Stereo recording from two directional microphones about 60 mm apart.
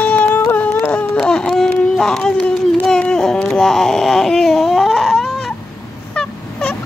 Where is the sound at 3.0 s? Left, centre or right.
Centre.